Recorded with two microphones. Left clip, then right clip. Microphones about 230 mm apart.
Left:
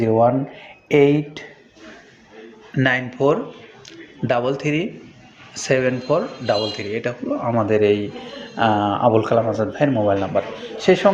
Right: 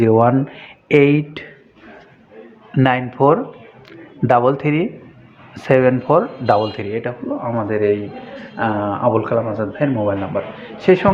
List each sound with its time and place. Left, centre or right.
0.0 s speech: right
2.7 s speech: centre
6.9 s speech: centre
7.4 s a man's voice: centre
10.6 s speech: centre